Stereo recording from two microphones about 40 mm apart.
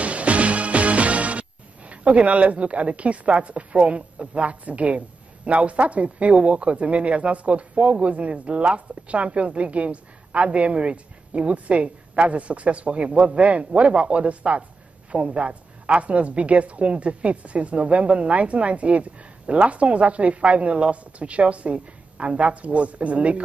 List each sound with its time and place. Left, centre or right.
0.0 s music: right
1.9 s speech: right